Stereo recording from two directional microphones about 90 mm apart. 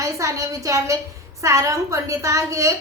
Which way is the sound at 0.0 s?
35° right (ahead or behind).